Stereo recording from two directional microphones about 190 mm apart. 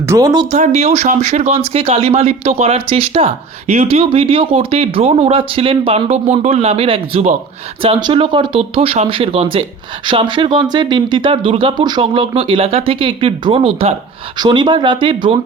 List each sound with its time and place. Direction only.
0.1 s speech: 20° right (ahead or behind)
0.5 s speech: 35° right (ahead or behind)